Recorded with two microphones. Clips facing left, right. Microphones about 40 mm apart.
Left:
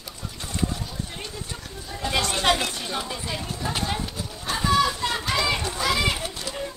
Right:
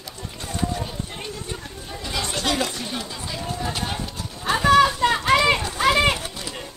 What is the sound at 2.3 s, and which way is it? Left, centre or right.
Chatter, left.